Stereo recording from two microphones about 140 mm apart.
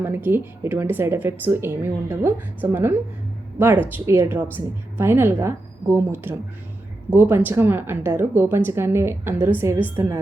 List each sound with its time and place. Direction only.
0.0 s a woman's voice: 15° right (ahead or behind)